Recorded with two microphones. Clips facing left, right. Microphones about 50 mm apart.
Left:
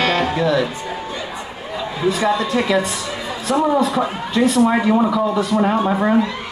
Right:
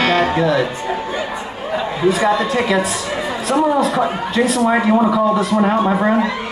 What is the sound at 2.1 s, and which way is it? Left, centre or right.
A man's voice, right.